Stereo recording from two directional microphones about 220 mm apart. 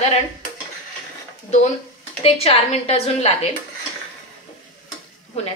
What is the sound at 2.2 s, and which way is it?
A woman's voice, 30° left (ahead or behind).